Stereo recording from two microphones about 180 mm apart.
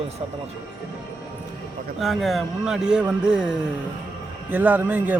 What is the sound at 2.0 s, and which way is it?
A man's voice, centre (ahead or behind).